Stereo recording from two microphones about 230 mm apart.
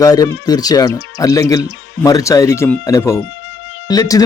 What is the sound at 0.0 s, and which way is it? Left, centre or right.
Speech, centre.